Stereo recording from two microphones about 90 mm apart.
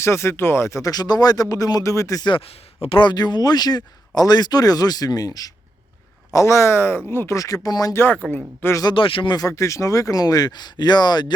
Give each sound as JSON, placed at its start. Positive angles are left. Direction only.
{"t": 0.0, "sound": "speech", "side_deg": 30}
{"t": 2.8, "sound": "speech", "side_deg": 65}
{"t": 6.3, "sound": "speech", "side_deg": 35}
{"t": 7.9, "sound": "speech", "side_deg": 25}
{"t": 8.8, "sound": "speech", "side_deg": 65}
{"t": 9.3, "sound": "speech", "side_deg": 40}